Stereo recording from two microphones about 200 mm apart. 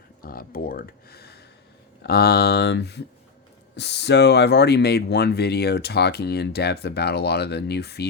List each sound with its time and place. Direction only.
0.2 s speech: 45° left (ahead or behind)